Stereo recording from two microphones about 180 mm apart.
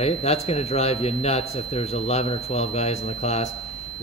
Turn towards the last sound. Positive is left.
turn(degrees=35)  # may be behind; listen again after turning